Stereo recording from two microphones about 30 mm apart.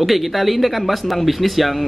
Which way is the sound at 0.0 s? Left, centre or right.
Centre.